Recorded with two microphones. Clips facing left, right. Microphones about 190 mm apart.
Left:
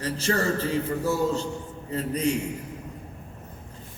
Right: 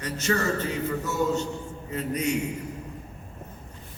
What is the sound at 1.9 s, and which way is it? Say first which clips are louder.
Speech: left 2 dB; 30° left (ahead or behind).